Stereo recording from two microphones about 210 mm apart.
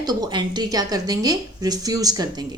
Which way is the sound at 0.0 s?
20° right (ahead or behind).